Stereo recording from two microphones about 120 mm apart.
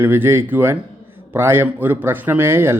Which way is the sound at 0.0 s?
20° right (ahead or behind).